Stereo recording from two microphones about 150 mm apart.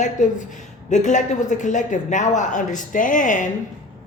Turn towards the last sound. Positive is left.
turn(degrees=60)  # may be behind; listen again after turning